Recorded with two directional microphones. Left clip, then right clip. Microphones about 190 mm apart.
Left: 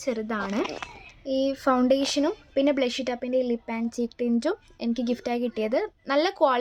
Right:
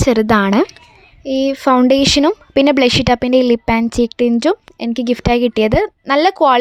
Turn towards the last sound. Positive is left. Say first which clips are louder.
# right 11 dB
turn(degrees=-40)  # may be behind; listen again after turning